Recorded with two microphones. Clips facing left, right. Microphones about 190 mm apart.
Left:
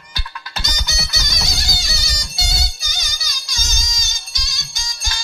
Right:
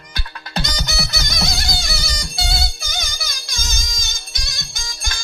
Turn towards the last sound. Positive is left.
turn(degrees=-55)  # may be behind; listen again after turning